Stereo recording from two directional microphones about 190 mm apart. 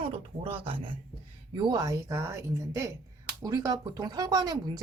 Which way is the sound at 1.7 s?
15° right (ahead or behind).